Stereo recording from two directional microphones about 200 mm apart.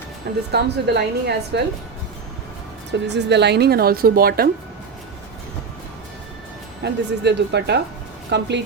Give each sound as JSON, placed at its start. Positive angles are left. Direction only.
{"t": 0.5, "sound": "a woman's voice", "side_deg": -55}
{"t": 3.1, "sound": "a woman's voice", "side_deg": -60}
{"t": 6.8, "sound": "a woman's voice", "side_deg": -60}